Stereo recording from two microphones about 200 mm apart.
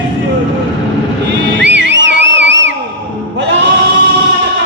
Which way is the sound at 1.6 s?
65° right (ahead or behind).